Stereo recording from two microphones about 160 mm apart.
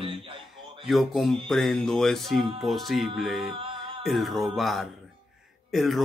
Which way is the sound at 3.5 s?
30° right (ahead or behind).